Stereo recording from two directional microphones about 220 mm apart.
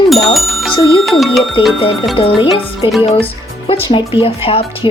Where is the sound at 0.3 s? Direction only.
Centre (ahead or behind).